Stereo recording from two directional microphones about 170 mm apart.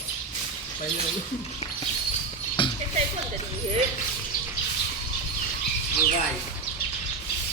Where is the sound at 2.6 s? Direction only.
30° left (ahead or behind).